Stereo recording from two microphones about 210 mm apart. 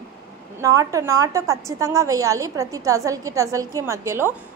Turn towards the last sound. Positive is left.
turn(degrees=-10)  # may be behind; listen again after turning